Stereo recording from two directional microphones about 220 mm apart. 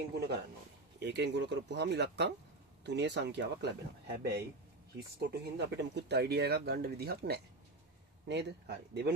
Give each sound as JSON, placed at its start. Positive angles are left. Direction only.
{"t": 0.1, "sound": "speech", "side_deg": -45}
{"t": 4.9, "sound": "speech", "side_deg": -45}